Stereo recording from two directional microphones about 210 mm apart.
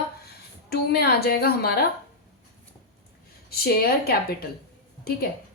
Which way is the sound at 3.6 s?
45° left (ahead or behind).